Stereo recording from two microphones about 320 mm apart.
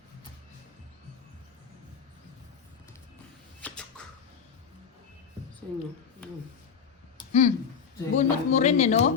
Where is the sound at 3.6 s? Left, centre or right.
Centre.